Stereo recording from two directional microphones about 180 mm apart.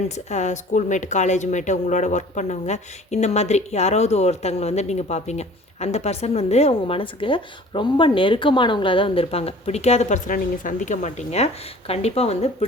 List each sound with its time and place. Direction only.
0.3 s speech: 40° left (ahead or behind)